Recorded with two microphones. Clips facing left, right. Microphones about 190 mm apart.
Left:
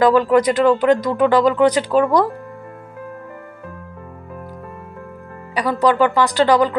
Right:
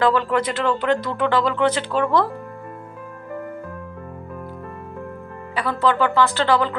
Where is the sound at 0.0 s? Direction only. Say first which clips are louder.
Left 6 dB; 10° left (ahead or behind).